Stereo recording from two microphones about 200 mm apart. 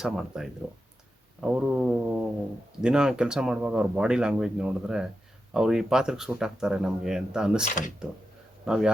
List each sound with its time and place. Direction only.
0.0 s speech: 5° right (ahead or behind)
7.7 s speech: 40° left (ahead or behind)
8.6 s a man's voice: 5° right (ahead or behind)